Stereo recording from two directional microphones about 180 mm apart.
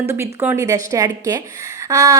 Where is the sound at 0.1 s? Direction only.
15° right (ahead or behind).